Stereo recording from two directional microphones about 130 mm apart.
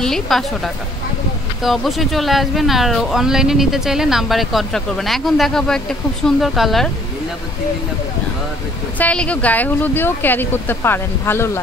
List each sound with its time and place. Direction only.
0.0 s speech: centre (ahead or behind)
1.6 s speech: centre (ahead or behind)
8.9 s speech: 10° left (ahead or behind)